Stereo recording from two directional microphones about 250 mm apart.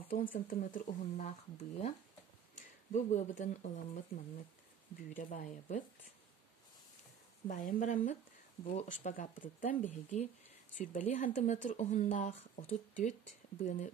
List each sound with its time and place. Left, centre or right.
0.3 s speech: left
7.4 s speech: left